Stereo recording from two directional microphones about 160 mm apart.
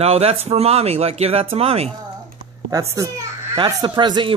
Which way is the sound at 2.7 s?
20° right (ahead or behind).